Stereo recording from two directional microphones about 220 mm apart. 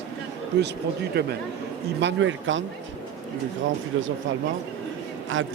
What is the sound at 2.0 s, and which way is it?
Speech, 55° right (ahead or behind).